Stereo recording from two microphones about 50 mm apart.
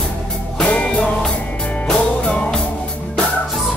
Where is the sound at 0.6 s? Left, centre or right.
Centre.